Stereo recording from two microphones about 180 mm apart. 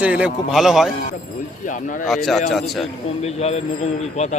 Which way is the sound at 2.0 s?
Centre (ahead or behind).